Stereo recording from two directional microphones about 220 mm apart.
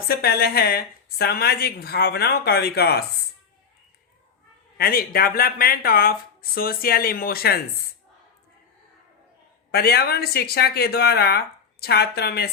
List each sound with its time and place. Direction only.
0.1 s speech: 45° left (ahead or behind)
4.8 s speech: 45° left (ahead or behind)
9.7 s speech: 45° left (ahead or behind)